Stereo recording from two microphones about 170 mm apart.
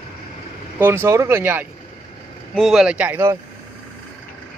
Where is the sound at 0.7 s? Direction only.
15° right (ahead or behind).